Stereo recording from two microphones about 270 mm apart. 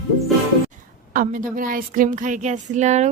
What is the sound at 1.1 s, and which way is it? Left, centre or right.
Speech, right.